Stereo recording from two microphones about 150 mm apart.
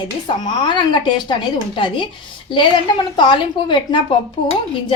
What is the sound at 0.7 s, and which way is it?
A woman's voice, 30° left (ahead or behind).